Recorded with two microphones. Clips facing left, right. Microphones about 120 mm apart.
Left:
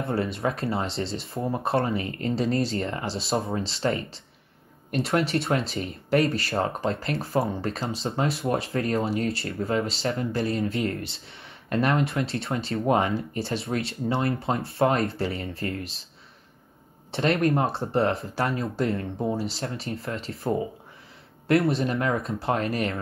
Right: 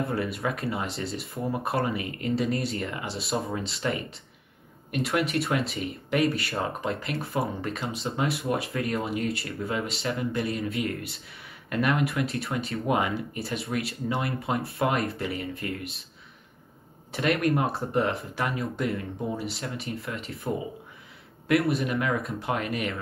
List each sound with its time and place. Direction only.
0.0 s speech: 30° left (ahead or behind)
17.1 s speech: 30° left (ahead or behind)